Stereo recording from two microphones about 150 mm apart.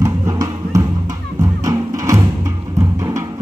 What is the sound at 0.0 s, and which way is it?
Music, 20° right (ahead or behind).